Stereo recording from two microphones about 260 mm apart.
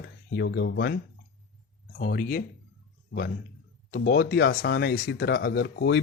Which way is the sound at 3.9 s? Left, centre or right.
Left.